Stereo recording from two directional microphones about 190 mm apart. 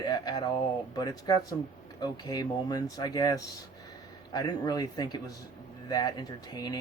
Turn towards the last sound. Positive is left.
turn(degrees=20)  # may be behind; listen again after turning